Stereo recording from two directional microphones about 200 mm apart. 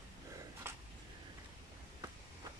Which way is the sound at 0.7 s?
10° right (ahead or behind).